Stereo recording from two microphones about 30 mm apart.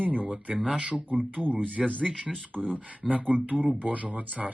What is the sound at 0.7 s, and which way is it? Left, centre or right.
Speech, right.